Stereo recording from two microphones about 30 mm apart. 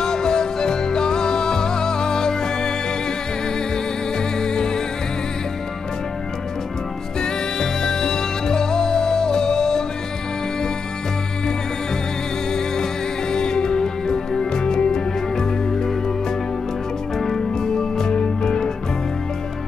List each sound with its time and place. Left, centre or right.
0.0 s music: left
4.4 s music: left
7.2 s music: left
13.3 s music: left
17.2 s music: centre